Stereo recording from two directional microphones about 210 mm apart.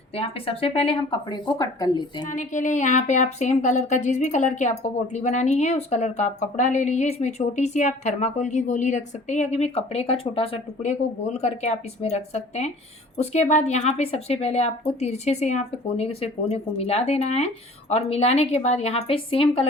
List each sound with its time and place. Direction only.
0.1 s speech: 25° left (ahead or behind)
2.2 s speech: 35° left (ahead or behind)